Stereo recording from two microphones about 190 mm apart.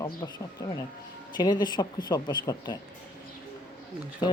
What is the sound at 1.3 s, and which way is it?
Speech, 20° left (ahead or behind).